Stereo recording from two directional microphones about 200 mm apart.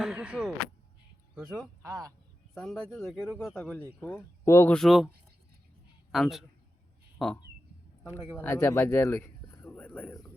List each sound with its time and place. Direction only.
0.0 s speech: 5° right (ahead or behind)
1.8 s speech: 15° right (ahead or behind)
2.6 s a man's voice: centre (ahead or behind)